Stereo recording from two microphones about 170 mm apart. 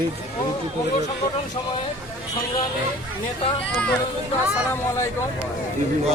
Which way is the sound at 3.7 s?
5° left (ahead or behind).